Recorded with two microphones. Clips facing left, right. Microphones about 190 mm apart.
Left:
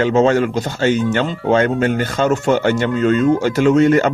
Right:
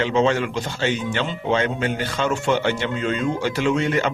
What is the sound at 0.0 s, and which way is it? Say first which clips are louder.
Speech: left 6 dB; 45° left (ahead or behind).